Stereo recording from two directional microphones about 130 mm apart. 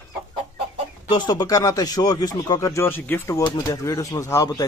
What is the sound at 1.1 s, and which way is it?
Speech, 30° left (ahead or behind).